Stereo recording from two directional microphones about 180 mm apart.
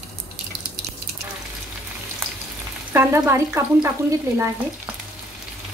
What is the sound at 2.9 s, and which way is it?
Speech, 15° right (ahead or behind).